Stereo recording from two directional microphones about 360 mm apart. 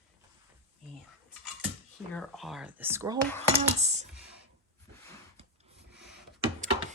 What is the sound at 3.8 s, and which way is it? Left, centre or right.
Speech, centre.